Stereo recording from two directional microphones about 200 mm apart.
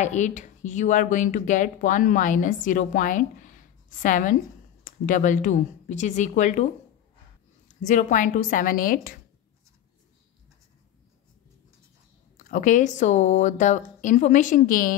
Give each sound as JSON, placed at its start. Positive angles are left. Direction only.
{"t": 0.0, "sound": "speech", "side_deg": 35}
{"t": 12.4, "sound": "speech", "side_deg": 40}